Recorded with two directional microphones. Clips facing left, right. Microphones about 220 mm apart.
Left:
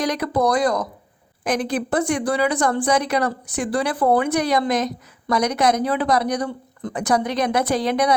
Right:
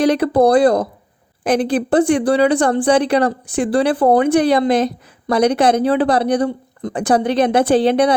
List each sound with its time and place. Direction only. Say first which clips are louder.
0.0 s a woman's voice: right 8 dB; 30° right (ahead or behind)